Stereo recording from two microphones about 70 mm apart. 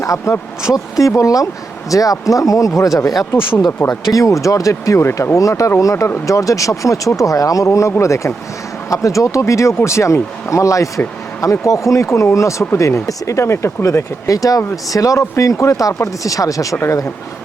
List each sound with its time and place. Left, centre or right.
0.0 s speech: left